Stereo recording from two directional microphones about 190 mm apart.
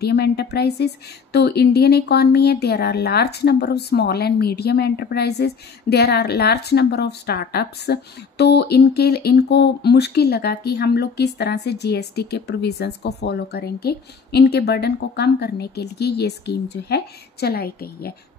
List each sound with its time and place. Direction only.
0.0 s speech: 60° left (ahead or behind)